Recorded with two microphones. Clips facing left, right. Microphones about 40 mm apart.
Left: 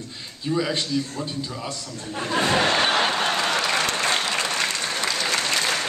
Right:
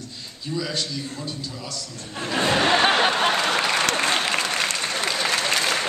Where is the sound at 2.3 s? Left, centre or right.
Centre.